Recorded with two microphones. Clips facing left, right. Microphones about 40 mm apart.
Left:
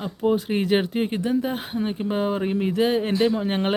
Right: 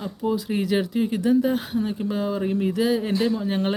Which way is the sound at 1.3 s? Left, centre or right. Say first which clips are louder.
Right 4 dB; left.